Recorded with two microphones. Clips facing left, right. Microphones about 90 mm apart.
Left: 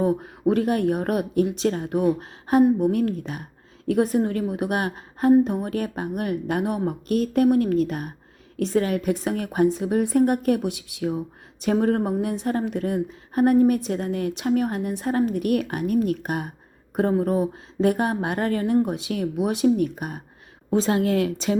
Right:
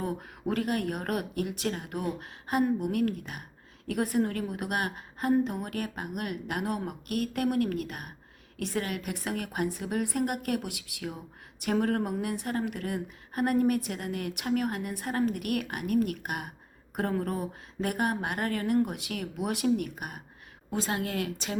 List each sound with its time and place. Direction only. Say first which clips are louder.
0.0 s a woman's voice: left 11 dB; 25° left (ahead or behind)
19.6 s a woman's voice: left 8 dB; 35° left (ahead or behind)